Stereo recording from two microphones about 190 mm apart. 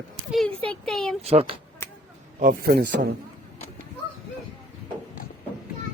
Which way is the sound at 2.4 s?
50° right (ahead or behind).